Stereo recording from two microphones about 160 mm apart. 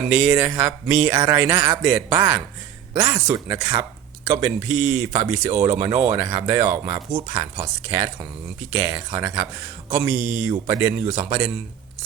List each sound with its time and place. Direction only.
0.3 s speech: 10° right (ahead or behind)
1.1 s speech: 25° right (ahead or behind)
1.4 s speech: 15° right (ahead or behind)
10.7 s speech: 20° right (ahead or behind)